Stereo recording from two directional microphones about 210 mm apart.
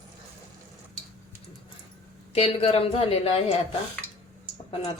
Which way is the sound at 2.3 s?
25° left (ahead or behind).